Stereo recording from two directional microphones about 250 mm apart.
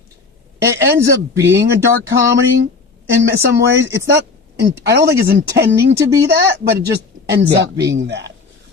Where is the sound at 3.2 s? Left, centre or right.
Right.